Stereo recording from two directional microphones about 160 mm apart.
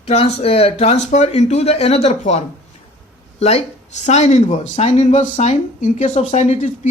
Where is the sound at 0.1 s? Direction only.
40° left (ahead or behind).